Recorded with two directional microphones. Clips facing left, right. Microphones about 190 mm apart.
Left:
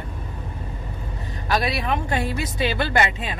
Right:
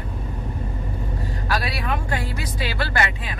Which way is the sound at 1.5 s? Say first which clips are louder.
Left 3 dB; 20° left (ahead or behind).